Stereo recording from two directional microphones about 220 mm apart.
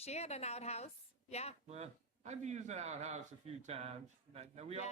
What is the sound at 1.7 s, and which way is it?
A man's voice, 30° right (ahead or behind).